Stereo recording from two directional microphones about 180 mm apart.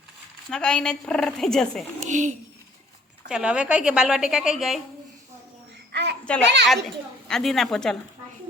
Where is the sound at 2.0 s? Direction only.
45° right (ahead or behind).